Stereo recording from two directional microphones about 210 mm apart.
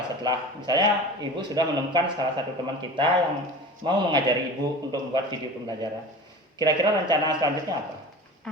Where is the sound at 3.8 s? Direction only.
25° right (ahead or behind).